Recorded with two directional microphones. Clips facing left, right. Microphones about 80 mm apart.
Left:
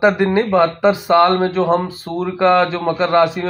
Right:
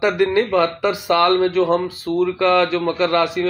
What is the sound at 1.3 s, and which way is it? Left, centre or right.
A man's voice, left.